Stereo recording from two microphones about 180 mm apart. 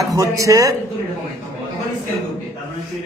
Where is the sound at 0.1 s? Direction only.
20° right (ahead or behind).